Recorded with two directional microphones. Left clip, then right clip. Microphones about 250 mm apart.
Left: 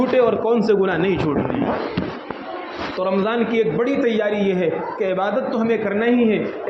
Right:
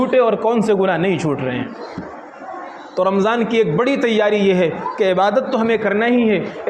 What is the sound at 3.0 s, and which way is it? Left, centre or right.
A man's voice, right.